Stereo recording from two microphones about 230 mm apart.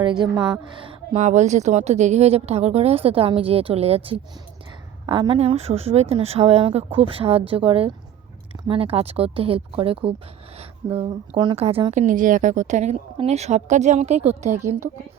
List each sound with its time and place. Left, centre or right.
0.0 s a woman's voice: centre